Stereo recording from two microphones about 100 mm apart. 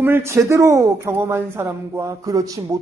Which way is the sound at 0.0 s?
25° right (ahead or behind).